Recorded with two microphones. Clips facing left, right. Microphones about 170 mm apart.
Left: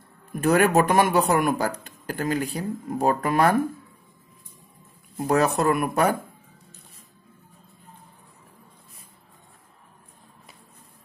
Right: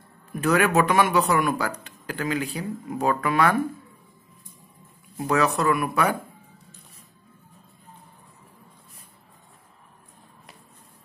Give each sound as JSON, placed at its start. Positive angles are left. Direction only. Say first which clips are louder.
{"t": 0.4, "sound": "speech", "louder": "left 2 dB", "side_deg": 45}
{"t": 5.2, "sound": "speech", "louder": "left 1 dB", "side_deg": 45}